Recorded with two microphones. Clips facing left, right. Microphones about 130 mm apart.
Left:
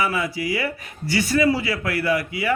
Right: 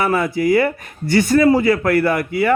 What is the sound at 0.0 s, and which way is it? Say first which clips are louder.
Speech: right 7 dB; 55° right (ahead or behind).